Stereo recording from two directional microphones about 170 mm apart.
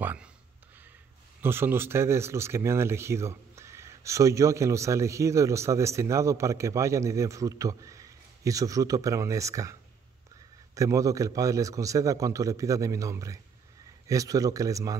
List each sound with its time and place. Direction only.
0.0 s speech: 10° right (ahead or behind)
1.4 s a man's voice: 15° right (ahead or behind)